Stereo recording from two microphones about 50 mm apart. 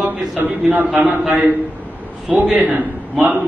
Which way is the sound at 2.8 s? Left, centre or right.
Right.